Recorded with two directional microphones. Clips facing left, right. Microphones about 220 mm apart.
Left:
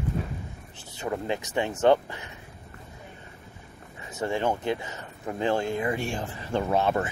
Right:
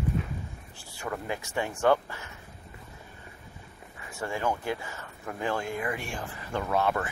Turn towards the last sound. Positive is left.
turn(degrees=25)  # may be behind; listen again after turning